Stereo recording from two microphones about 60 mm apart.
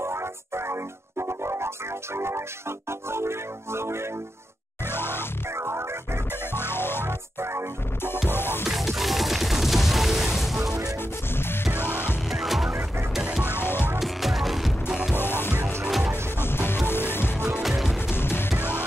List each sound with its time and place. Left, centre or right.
0.0 s music: right
4.8 s music: left
5.6 s music: right
6.5 s music: left
7.1 s music: right
8.3 s music: left
8.6 s music: centre
11.7 s music: left
12.3 s music: centre
13.5 s music: left
13.9 s music: centre
15.1 s music: left
17.6 s music: centre
18.1 s music: left